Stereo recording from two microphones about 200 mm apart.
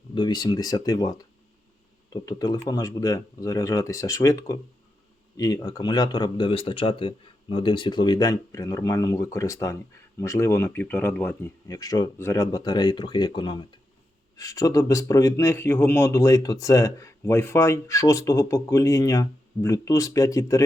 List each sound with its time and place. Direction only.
0.1 s speech: 20° left (ahead or behind)